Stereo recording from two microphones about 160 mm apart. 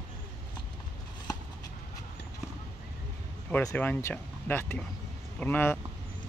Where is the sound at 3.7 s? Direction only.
15° left (ahead or behind).